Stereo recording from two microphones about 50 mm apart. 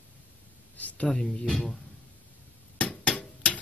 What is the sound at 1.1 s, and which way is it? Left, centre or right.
Speech, centre.